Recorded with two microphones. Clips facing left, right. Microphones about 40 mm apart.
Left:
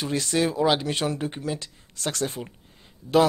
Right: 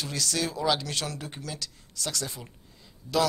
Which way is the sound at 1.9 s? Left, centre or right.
Left.